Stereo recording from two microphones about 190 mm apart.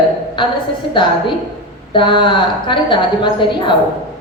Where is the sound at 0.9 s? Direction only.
25° left (ahead or behind).